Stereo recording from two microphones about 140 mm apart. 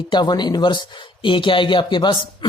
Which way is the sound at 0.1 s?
30° left (ahead or behind).